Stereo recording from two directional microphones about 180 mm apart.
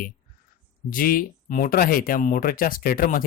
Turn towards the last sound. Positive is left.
turn(degrees=50)  # may be behind; listen again after turning